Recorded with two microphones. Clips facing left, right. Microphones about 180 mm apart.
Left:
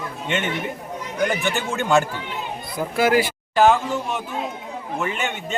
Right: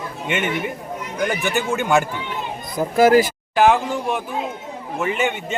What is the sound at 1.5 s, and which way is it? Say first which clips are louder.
Speech: right 3 dB; 15° right (ahead or behind).